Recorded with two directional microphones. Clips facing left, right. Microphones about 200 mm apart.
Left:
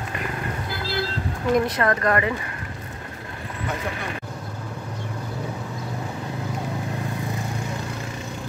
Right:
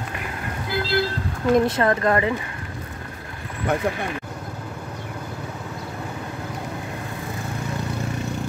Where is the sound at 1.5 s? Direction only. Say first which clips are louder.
Right 3 dB; 25° right (ahead or behind).